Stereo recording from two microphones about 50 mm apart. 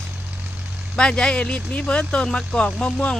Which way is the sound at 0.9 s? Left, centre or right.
Centre.